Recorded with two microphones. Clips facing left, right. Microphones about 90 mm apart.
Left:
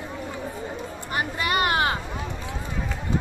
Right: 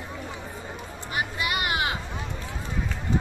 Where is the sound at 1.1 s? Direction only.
40° left (ahead or behind).